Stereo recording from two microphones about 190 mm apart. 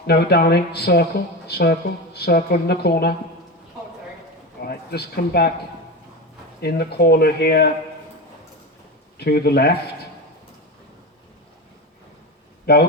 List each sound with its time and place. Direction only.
0.1 s speech: 55° left (ahead or behind)
4.6 s speech: 55° left (ahead or behind)
6.6 s speech: 55° left (ahead or behind)
9.1 s speech: 55° left (ahead or behind)
12.7 s speech: 60° left (ahead or behind)